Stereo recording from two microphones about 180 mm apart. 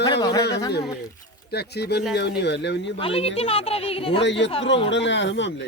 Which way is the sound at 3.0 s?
30° left (ahead or behind).